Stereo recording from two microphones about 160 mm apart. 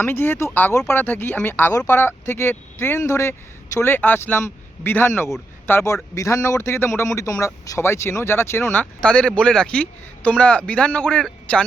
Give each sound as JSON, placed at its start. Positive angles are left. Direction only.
{"t": 0.0, "sound": "speech", "side_deg": 15}